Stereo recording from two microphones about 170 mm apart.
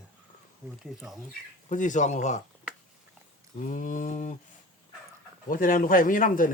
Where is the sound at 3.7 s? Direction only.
55° left (ahead or behind).